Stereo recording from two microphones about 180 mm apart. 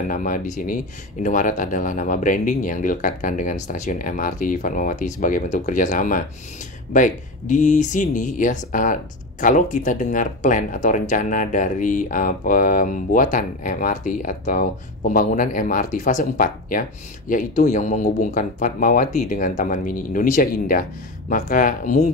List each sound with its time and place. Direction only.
0.1 s speech: 50° left (ahead or behind)